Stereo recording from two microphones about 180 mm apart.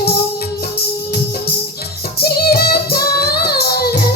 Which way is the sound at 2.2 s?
60° left (ahead or behind).